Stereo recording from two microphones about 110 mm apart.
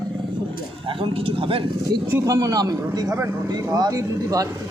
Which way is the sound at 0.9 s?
55° right (ahead or behind).